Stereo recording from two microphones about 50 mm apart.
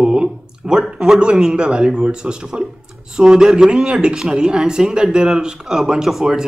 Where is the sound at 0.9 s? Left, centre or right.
Centre.